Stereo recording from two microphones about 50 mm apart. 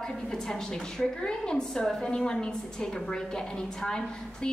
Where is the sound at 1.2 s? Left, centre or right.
Centre.